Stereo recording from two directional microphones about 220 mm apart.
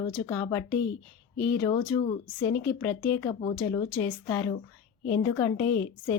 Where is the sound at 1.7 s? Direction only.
25° left (ahead or behind).